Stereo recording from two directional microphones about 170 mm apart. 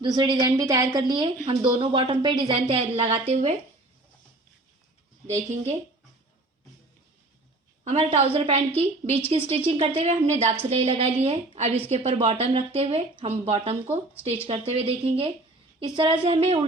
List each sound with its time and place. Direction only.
0.0 s a woman's voice: 25° right (ahead or behind)
5.2 s speech: 40° right (ahead or behind)
7.9 s speech: 40° right (ahead or behind)
12.3 s speech: 30° right (ahead or behind)